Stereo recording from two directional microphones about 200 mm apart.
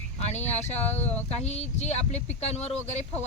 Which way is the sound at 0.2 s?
35° left (ahead or behind).